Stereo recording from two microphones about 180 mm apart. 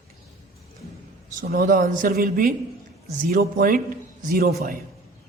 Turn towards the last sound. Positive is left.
turn(degrees=-50)  # may be behind; listen again after turning